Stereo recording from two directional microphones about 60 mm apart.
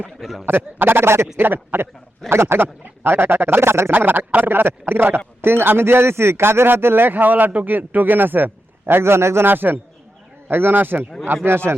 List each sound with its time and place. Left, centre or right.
0.2 s a man's voice: centre
0.4 s a man's voice: right
1.4 s a man's voice: right
9.5 s a man's voice: right